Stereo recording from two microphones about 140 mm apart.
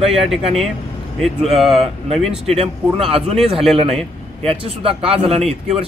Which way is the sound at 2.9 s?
45° right (ahead or behind).